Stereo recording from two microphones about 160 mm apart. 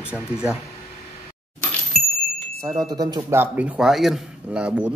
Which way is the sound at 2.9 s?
25° right (ahead or behind).